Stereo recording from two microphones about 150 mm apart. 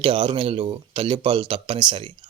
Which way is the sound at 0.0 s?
35° right (ahead or behind).